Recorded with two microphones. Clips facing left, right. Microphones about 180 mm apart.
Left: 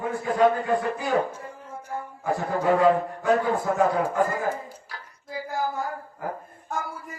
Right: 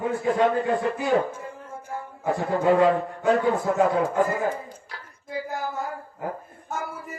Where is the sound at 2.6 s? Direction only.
25° right (ahead or behind).